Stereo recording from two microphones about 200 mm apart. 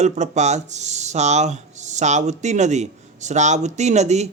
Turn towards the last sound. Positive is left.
turn(degrees=-35)  # may be behind; listen again after turning